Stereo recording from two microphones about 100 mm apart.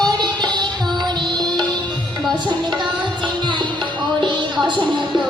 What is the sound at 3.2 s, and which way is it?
Music, 50° right (ahead or behind).